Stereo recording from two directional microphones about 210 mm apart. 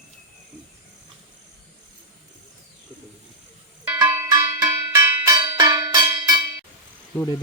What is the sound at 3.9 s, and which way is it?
Music, 10° right (ahead or behind).